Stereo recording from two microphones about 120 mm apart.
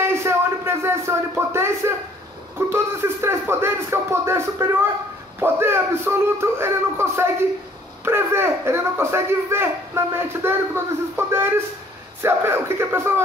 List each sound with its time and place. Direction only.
0.0 s music: 20° right (ahead or behind)
2.7 s a child's voice: 20° right (ahead or behind)